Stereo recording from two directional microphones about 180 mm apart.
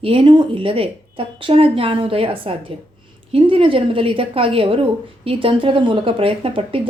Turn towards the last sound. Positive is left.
turn(degrees=-30)  # may be behind; listen again after turning